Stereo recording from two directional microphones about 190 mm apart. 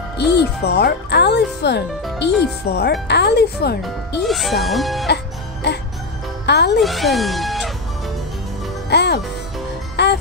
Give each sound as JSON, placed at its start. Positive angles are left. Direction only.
{"t": 0.2, "sound": "speech", "side_deg": 60}
{"t": 4.2, "sound": "speech", "side_deg": 0}
{"t": 5.0, "sound": "music", "side_deg": 60}
{"t": 6.4, "sound": "speech", "side_deg": 60}
{"t": 6.8, "sound": "speech", "side_deg": 0}
{"t": 8.9, "sound": "speech", "side_deg": 60}
{"t": 10.0, "sound": "music", "side_deg": 65}